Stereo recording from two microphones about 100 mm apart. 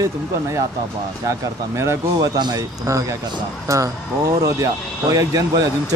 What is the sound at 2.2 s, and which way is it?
Speech, 45° right (ahead or behind).